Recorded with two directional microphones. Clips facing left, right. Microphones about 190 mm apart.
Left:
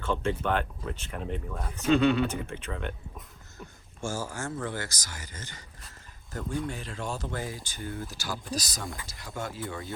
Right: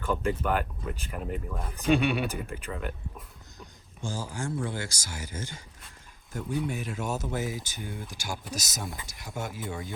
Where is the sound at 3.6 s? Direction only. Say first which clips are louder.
Left 4 dB; 15° right (ahead or behind).